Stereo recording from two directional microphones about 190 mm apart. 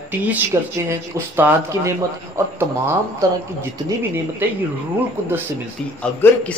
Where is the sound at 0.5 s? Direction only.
15° right (ahead or behind).